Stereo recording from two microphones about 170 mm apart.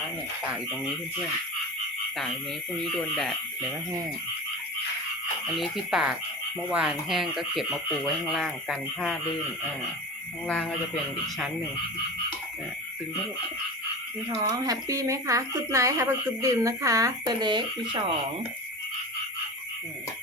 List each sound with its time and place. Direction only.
5.5 s speech: centre (ahead or behind)
10.4 s speech: 5° left (ahead or behind)
14.5 s speech: 20° right (ahead or behind)